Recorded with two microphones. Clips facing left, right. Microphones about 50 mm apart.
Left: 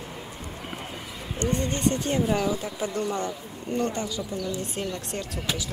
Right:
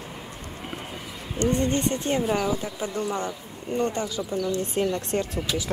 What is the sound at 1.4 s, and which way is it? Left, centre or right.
Speech, right.